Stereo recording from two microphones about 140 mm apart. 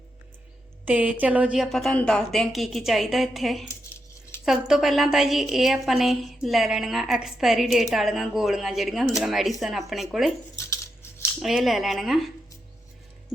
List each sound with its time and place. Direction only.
0.9 s a woman's voice: 10° right (ahead or behind)
10.5 s scissors: 20° left (ahead or behind)
11.3 s a woman's voice: centre (ahead or behind)